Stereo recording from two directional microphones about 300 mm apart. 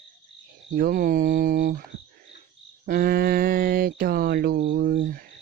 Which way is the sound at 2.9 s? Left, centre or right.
Right.